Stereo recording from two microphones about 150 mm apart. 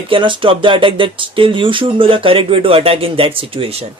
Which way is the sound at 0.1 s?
35° right (ahead or behind).